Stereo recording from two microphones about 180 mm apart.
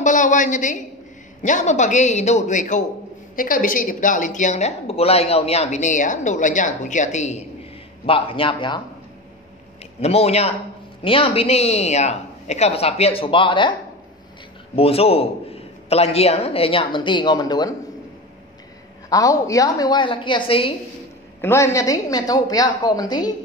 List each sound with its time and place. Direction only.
0.0 s a woman's voice: 45° left (ahead or behind); by 8.8 s 25° left (ahead or behind)
9.9 s a man's voice: 35° left (ahead or behind)
14.8 s a man's voice: 35° left (ahead or behind)
19.0 s a woman's voice: 20° left (ahead or behind)
21.4 s a woman's voice: 15° left (ahead or behind)